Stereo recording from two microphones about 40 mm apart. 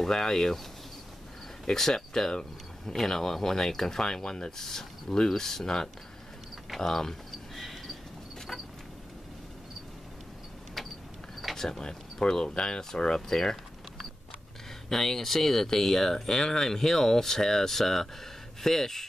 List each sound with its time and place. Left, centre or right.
0.0 s speech: centre
1.7 s speech: centre
4.6 s speech: centre
6.8 s cricket: centre
11.5 s speech: centre
14.9 s speech: centre